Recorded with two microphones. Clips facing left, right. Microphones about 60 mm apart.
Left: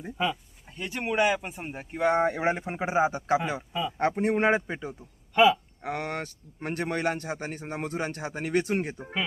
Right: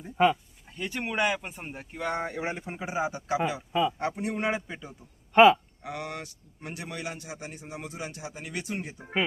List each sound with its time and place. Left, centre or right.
0.8 s speech: centre
1.8 s a man's voice: left
3.7 s speech: right
3.9 s a man's voice: left
5.3 s speech: right
5.8 s speech: left